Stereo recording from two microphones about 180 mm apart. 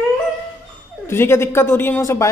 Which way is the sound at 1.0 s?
15° left (ahead or behind).